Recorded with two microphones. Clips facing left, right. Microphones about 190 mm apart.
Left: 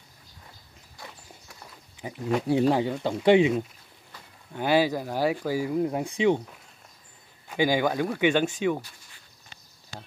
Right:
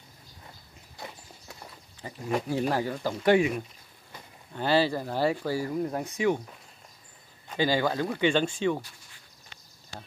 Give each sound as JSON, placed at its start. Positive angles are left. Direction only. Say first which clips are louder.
{"t": 2.0, "sound": "a sound", "louder": "left 5 dB", "side_deg": 15}
{"t": 2.7, "sound": "speech", "louder": "left 4 dB", "side_deg": 20}
{"t": 7.4, "sound": "speech", "louder": "left 2 dB", "side_deg": 15}